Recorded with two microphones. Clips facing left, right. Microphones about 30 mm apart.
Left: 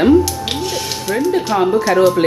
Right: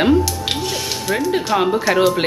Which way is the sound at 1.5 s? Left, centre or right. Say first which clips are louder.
Left 1 dB; centre.